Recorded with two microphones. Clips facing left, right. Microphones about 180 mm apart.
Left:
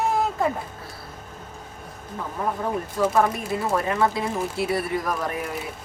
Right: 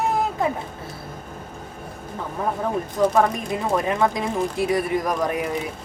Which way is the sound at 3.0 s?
20° right (ahead or behind).